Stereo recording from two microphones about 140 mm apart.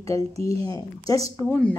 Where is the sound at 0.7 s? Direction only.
25° left (ahead or behind).